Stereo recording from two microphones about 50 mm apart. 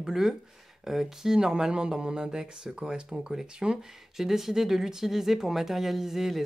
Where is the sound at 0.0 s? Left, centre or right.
Centre.